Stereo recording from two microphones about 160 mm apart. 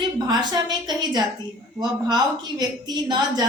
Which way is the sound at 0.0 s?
25° right (ahead or behind).